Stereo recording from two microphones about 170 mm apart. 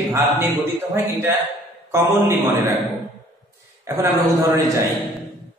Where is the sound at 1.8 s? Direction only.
15° right (ahead or behind).